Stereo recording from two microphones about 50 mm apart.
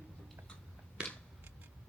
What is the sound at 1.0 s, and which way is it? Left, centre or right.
Scissors, right.